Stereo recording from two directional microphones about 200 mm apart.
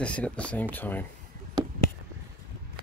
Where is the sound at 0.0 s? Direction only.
5° left (ahead or behind).